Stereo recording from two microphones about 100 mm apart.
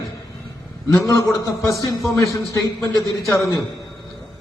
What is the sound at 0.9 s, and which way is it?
Speech, 30° left (ahead or behind).